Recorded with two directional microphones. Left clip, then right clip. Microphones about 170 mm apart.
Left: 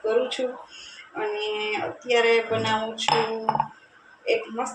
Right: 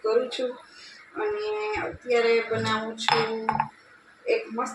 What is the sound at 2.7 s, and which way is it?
Music, centre (ahead or behind).